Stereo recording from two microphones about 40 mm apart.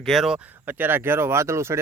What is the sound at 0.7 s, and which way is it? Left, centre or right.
Speech, right.